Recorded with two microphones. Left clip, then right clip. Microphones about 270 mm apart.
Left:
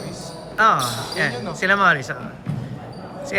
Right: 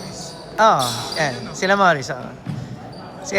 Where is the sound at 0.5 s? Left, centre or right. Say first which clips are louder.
Right 2 dB; centre.